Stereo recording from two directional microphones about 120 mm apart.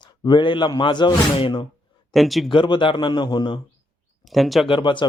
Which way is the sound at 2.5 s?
45° left (ahead or behind).